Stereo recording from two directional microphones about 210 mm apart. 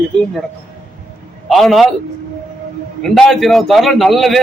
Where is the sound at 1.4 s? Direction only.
Centre (ahead or behind).